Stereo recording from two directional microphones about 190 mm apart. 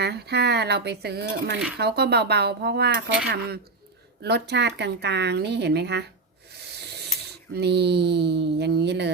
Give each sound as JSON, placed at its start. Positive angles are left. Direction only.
{"t": 0.0, "sound": "speech", "side_deg": -60}
{"t": 6.7, "sound": "rub", "side_deg": -60}
{"t": 7.5, "sound": "speech", "side_deg": -60}